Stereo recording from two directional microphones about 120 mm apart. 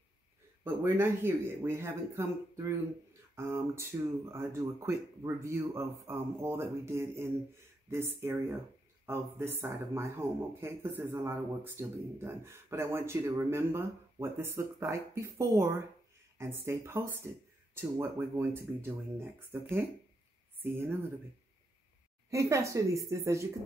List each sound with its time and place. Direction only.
0.7 s speech: 20° right (ahead or behind)
19.5 s speech: 20° right (ahead or behind)
20.7 s speech: 20° right (ahead or behind)
22.3 s speech: 25° right (ahead or behind)